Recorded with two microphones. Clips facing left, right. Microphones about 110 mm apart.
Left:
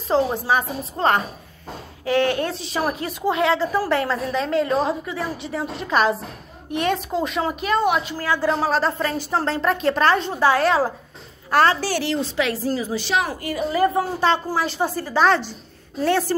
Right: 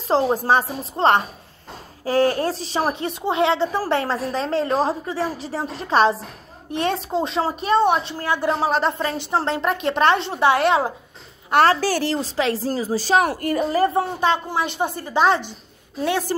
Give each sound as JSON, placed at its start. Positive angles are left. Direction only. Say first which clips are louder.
{"t": 0.1, "sound": "a woman's voice", "louder": "right 2 dB", "side_deg": -35}
{"t": 11.7, "sound": "a woman's voice", "louder": "right 2 dB", "side_deg": -40}
{"t": 13.2, "sound": "a woman's voice", "louder": "right 4 dB", "side_deg": -55}
{"t": 13.7, "sound": "a woman's voice", "louder": "left 1 dB", "side_deg": -35}
{"t": 14.2, "sound": "a woman's voice", "louder": "left 1 dB", "side_deg": -20}